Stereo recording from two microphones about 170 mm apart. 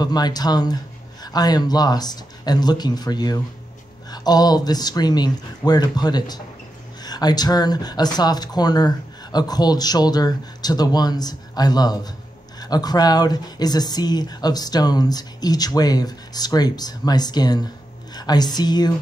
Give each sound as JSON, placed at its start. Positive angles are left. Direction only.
{"t": 0.0, "sound": "speech", "side_deg": 25}